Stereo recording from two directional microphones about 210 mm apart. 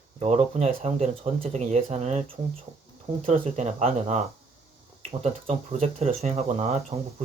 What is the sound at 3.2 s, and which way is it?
Speech, 30° right (ahead or behind).